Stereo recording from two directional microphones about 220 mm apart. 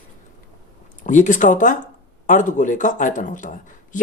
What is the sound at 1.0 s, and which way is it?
A woman's voice, 35° left (ahead or behind).